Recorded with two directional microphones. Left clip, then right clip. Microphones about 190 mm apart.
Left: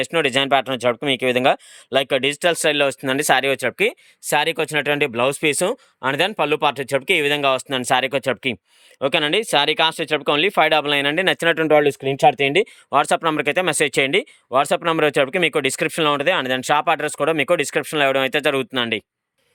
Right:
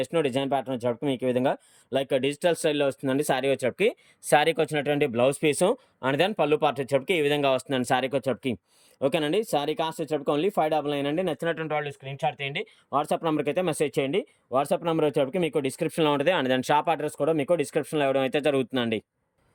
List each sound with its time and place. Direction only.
0.0 s speech: centre (ahead or behind)
13.1 s speech: centre (ahead or behind)
14.0 s speech: 40° left (ahead or behind)
14.5 s speech: centre (ahead or behind)